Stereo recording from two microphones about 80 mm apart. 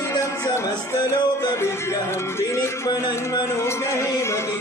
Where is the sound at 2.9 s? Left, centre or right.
Left.